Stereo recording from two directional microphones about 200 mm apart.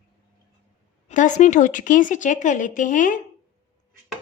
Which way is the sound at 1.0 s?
40° left (ahead or behind).